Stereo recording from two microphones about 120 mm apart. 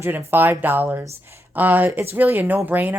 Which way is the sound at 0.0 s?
20° right (ahead or behind).